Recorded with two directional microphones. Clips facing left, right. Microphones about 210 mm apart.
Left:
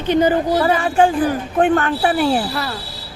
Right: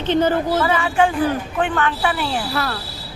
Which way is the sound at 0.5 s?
40° left (ahead or behind).